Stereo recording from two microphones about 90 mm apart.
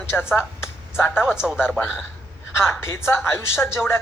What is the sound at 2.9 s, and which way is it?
Speech, 30° left (ahead or behind).